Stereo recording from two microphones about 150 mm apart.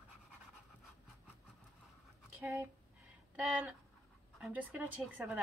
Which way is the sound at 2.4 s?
20° right (ahead or behind).